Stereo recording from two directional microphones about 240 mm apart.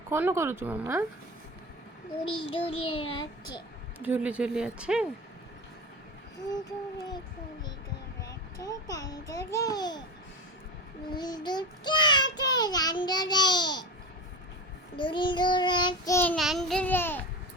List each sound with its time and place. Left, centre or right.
0.1 s speech: centre
2.5 s child singing: left
4.0 s speech: centre
6.5 s a child's voice: centre
8.2 s a child's voice: centre
11.1 s a child's voice: centre
14.9 s a child's voice: centre